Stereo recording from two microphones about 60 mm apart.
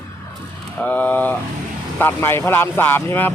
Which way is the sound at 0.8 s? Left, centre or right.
Left.